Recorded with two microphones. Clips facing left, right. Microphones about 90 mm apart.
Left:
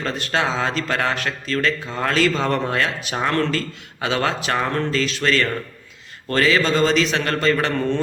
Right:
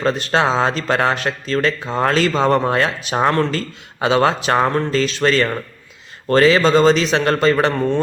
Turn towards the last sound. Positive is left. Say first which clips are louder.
# right 5 dB
turn(degrees=-25)  # may be behind; listen again after turning